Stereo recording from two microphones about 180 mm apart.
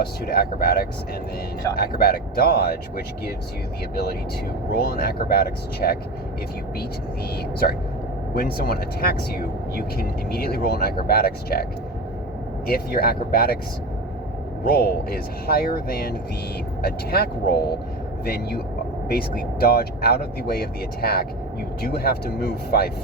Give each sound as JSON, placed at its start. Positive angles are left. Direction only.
{"t": 0.0, "sound": "speech", "side_deg": 60}
{"t": 4.7, "sound": "speech", "side_deg": 60}
{"t": 8.4, "sound": "speech", "side_deg": 60}
{"t": 12.6, "sound": "speech", "side_deg": 60}
{"t": 14.6, "sound": "speech", "side_deg": 55}